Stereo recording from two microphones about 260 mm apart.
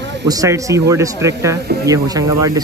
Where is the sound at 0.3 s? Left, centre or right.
Centre.